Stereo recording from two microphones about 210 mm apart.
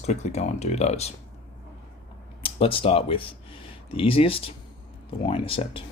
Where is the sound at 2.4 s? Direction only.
25° left (ahead or behind).